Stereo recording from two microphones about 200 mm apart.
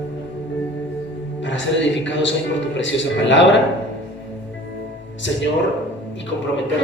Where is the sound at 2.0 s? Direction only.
65° left (ahead or behind).